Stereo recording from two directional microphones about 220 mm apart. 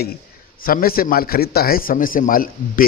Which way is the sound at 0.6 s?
40° left (ahead or behind).